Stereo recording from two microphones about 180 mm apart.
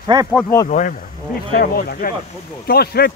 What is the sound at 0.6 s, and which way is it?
Speech, 45° left (ahead or behind).